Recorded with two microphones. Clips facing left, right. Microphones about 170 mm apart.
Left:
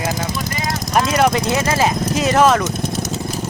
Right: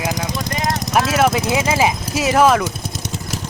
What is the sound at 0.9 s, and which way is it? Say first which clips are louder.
Speech: left 1 dB; 5° right (ahead or behind).